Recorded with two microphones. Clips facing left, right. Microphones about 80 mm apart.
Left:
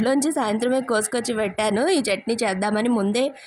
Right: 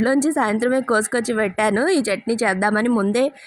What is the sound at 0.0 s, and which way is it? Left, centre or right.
A woman's voice, right.